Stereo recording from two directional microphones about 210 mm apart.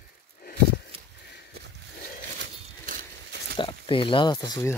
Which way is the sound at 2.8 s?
45° right (ahead or behind).